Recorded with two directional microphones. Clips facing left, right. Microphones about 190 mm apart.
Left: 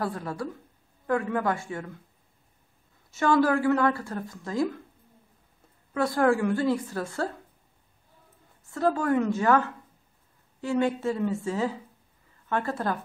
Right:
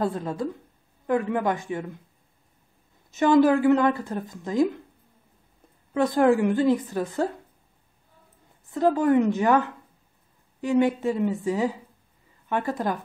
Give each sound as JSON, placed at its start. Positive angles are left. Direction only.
{"t": 0.0, "sound": "speech", "side_deg": -20}
{"t": 3.1, "sound": "speech", "side_deg": -20}
{"t": 5.9, "sound": "a woman's voice", "side_deg": -20}
{"t": 8.6, "sound": "a woman's voice", "side_deg": -20}